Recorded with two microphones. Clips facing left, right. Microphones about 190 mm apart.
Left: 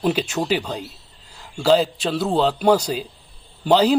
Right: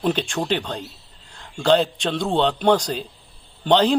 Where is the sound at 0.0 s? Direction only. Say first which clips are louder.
Left 1 dB; 5° left (ahead or behind).